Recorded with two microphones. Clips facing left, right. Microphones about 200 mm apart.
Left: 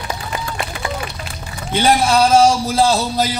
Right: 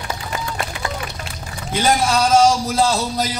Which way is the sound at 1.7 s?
30° left (ahead or behind).